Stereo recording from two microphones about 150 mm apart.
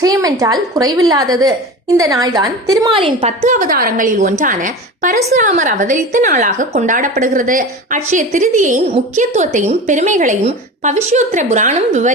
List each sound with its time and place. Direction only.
0.0 s a woman's voice: 20° right (ahead or behind); by 12.1 s 50° right (ahead or behind)